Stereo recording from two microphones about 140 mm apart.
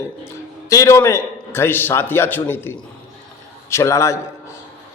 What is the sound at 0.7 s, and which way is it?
A man's voice, 25° left (ahead or behind).